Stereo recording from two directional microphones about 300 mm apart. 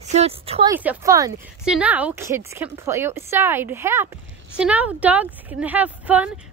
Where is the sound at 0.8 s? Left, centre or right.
Centre.